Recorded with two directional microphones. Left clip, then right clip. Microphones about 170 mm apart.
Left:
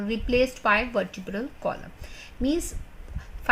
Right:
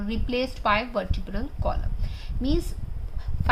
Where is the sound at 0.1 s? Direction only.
40° left (ahead or behind).